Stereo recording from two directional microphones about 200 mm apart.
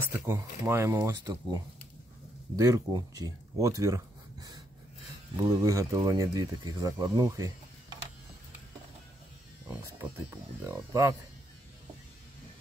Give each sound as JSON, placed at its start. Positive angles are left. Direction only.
{"t": 0.0, "sound": "speech", "side_deg": -10}
{"t": 2.5, "sound": "speech", "side_deg": -20}
{"t": 9.7, "sound": "speech", "side_deg": -15}